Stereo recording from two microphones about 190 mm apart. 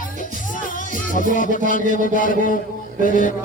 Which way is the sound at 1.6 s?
45° left (ahead or behind).